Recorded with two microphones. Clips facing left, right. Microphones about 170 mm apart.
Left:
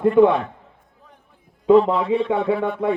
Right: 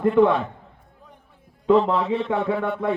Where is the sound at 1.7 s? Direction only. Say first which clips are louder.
Left 4 dB; 10° left (ahead or behind).